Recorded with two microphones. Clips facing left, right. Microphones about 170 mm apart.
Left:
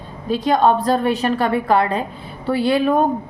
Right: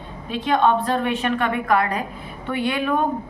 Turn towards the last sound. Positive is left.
turn(degrees=35)  # may be behind; listen again after turning